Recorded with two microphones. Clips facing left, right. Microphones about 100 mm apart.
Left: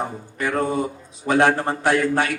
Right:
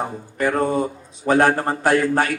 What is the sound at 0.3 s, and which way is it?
A man's voice, 45° right (ahead or behind).